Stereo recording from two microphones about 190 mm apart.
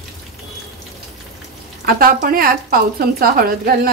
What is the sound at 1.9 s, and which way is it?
A woman's voice, 50° right (ahead or behind).